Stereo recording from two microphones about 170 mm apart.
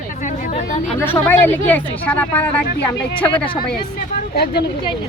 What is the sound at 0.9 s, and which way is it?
Speech, 10° left (ahead or behind).